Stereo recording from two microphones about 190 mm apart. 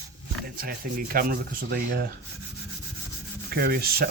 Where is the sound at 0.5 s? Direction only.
50° right (ahead or behind).